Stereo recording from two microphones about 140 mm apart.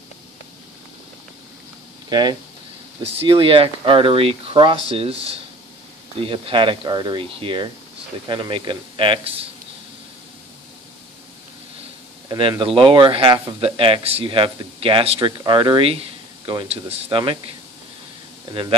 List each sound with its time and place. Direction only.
2.0 s speech: 30° right (ahead or behind)
3.0 s speech: 40° right (ahead or behind)
12.3 s speech: 35° right (ahead or behind)
18.5 s speech: 40° right (ahead or behind)